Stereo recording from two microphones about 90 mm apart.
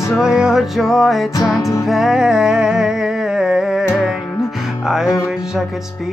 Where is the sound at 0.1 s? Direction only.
5° right (ahead or behind).